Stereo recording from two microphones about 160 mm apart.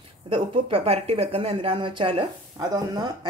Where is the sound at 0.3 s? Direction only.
35° right (ahead or behind).